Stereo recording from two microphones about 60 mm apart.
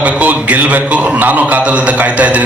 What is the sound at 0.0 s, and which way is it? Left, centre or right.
A man's voice, right.